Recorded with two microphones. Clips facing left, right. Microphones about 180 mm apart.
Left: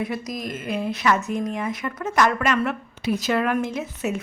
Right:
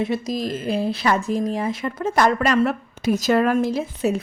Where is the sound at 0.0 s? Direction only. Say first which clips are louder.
Right 5 dB; 25° right (ahead or behind).